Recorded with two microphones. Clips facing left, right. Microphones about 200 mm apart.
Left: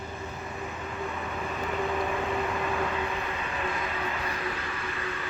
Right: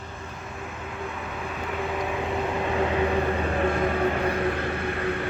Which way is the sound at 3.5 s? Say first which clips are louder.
Right 8 dB; 50° right (ahead or behind).